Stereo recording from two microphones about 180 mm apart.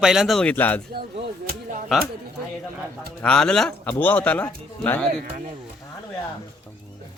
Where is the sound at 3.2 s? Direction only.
5° left (ahead or behind).